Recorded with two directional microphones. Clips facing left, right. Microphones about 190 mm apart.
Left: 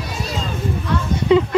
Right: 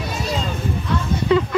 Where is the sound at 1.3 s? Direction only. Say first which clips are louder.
Left 3 dB; 20° left (ahead or behind).